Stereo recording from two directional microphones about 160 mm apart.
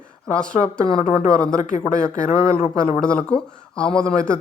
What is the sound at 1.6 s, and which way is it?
Speech, 50° left (ahead or behind).